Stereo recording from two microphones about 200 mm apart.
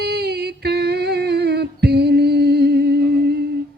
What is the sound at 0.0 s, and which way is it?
Humming, 55° right (ahead or behind).